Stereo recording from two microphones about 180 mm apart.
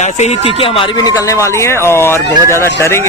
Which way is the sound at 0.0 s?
35° left (ahead or behind).